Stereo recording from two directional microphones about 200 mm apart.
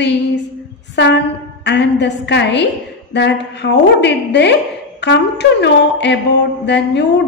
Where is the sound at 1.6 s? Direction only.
60° left (ahead or behind).